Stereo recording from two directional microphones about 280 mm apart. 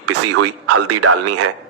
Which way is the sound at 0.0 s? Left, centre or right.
Right.